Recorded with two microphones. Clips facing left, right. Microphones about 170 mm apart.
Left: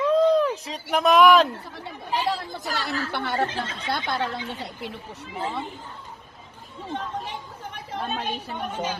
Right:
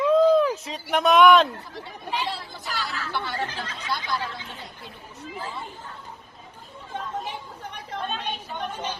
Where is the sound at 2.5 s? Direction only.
55° left (ahead or behind).